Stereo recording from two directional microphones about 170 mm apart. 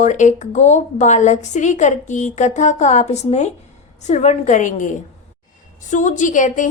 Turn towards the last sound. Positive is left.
turn(degrees=50)  # may be behind; listen again after turning